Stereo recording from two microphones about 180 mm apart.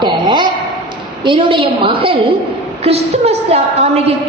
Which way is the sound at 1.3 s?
30° right (ahead or behind).